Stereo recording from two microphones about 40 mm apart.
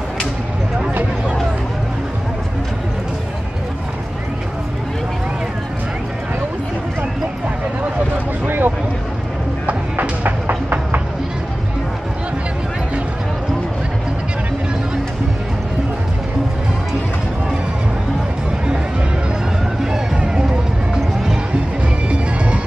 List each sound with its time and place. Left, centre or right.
8.5 s a sound: right
9.7 s clip-clop: right
20.2 s music: centre